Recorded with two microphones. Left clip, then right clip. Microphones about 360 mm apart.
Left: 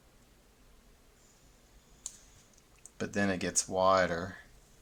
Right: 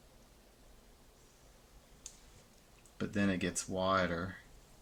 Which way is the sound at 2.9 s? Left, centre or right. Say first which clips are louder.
Left 3 dB; centre.